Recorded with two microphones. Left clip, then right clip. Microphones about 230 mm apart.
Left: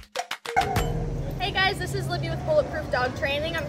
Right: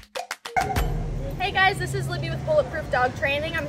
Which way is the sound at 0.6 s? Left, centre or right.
Left.